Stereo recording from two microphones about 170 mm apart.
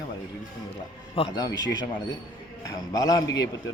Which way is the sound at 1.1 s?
30° left (ahead or behind).